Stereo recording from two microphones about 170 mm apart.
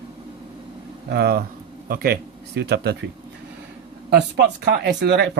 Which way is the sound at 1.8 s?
60° right (ahead or behind).